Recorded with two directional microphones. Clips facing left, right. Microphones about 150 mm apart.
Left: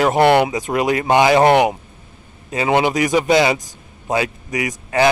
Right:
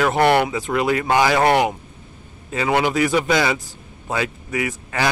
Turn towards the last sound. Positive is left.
turn(degrees=20)  # may be behind; listen again after turning